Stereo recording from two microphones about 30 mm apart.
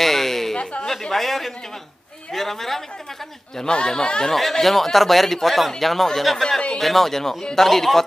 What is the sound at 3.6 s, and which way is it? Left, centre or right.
Speech, left.